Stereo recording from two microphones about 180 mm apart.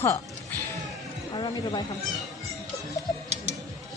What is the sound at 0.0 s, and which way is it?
Speech, 10° left (ahead or behind).